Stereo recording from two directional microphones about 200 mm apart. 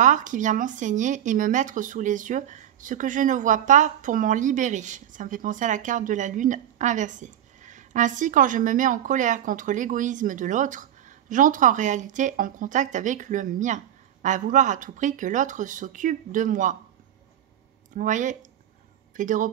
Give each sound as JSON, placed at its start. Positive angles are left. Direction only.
{"t": 0.0, "sound": "speech", "side_deg": -40}
{"t": 17.9, "sound": "speech", "side_deg": -40}